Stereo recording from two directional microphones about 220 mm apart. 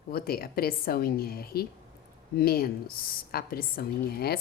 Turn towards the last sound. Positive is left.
turn(degrees=45)  # may be behind; listen again after turning